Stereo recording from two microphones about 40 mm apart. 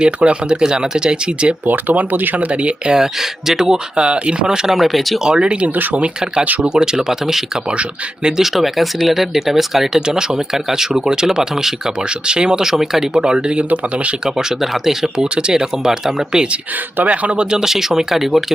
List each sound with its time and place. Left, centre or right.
0.0 s speech: right
1.6 s speech: right
2.5 s speech: right
2.9 s speech: centre
5.4 s speech: right
5.6 s speech: right
6.0 s speech: centre
7.7 s speech: right
8.4 s speech: centre
12.0 s speech: right
13.2 s speech: right
14.3 s speech: centre
17.0 s speech: right
17.6 s speech: centre